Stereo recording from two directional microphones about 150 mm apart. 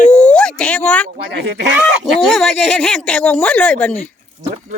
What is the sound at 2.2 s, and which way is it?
Speech, 5° left (ahead or behind).